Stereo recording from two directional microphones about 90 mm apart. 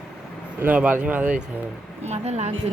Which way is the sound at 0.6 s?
20° right (ahead or behind).